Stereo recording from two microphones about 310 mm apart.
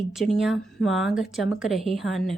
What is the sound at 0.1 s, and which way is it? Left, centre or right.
A woman's voice, centre.